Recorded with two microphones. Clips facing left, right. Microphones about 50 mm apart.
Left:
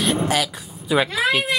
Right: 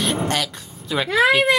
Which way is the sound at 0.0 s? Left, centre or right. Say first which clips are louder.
Left 2 dB; centre.